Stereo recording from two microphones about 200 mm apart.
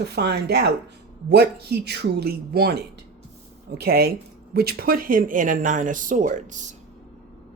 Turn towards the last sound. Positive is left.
turn(degrees=-40)  # may be behind; listen again after turning